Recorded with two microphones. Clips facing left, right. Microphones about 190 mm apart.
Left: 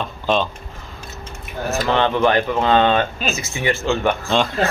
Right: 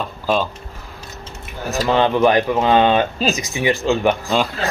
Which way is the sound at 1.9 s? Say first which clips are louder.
Right 3 dB; 10° right (ahead or behind).